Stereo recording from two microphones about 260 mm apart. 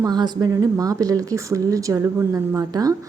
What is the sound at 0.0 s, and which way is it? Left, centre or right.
A woman's voice, centre.